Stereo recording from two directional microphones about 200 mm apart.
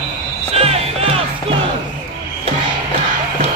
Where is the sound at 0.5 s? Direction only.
30° right (ahead or behind).